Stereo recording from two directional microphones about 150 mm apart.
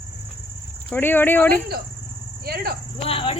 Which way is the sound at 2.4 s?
90° right.